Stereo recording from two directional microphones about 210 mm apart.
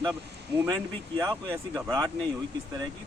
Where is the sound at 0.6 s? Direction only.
15° right (ahead or behind).